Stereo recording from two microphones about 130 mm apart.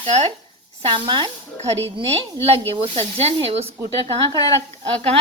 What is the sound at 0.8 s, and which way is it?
Speech, 40° right (ahead or behind).